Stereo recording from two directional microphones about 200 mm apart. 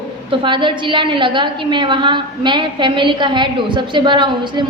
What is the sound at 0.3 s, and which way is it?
A woman's voice, 25° right (ahead or behind).